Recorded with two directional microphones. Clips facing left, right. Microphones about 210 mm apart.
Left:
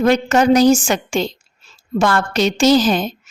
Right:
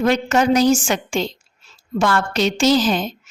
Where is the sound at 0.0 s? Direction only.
40° left (ahead or behind).